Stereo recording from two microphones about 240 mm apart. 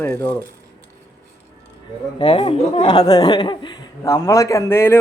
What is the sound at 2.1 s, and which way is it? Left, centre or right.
Speech, left.